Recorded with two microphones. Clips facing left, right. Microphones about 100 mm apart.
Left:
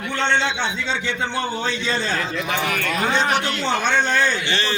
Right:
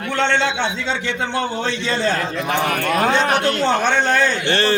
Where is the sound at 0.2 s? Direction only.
75° right (ahead or behind).